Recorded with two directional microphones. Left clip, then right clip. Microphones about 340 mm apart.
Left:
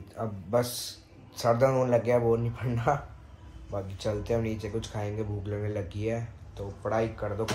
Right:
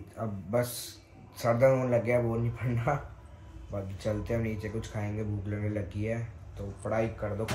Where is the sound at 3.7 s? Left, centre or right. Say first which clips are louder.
Left 2 dB; centre.